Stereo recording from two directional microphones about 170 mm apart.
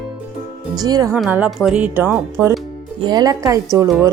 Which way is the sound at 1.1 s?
5° right (ahead or behind).